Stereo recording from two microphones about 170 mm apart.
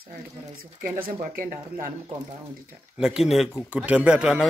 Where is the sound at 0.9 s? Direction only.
55° right (ahead or behind).